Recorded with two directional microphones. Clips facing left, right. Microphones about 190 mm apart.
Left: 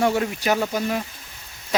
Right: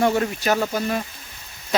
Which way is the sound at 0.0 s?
10° left (ahead or behind).